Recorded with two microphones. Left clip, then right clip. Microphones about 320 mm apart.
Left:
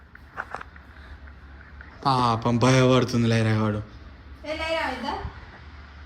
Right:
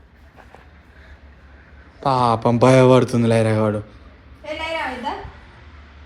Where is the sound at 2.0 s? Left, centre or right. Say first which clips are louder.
Right 5 dB; centre.